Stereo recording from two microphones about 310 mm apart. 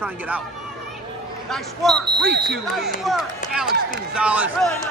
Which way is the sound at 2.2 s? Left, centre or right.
Right.